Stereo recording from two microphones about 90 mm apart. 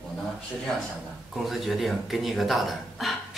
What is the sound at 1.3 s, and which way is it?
A woman's voice, centre (ahead or behind).